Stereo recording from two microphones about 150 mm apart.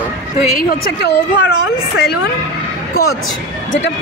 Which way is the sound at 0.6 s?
75° left (ahead or behind).